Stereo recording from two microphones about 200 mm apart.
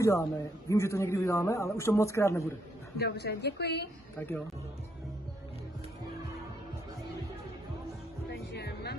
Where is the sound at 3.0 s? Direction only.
55° left (ahead or behind).